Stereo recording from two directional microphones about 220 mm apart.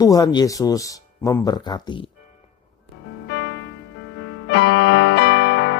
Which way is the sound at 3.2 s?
60° left (ahead or behind).